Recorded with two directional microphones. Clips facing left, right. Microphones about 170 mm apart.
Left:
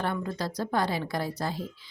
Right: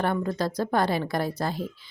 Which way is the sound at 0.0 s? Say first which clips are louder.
Right 5 dB; 50° right (ahead or behind).